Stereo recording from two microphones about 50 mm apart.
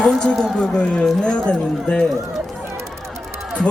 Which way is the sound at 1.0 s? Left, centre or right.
Centre.